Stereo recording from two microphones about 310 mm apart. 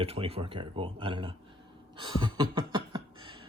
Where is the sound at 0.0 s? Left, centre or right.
Centre.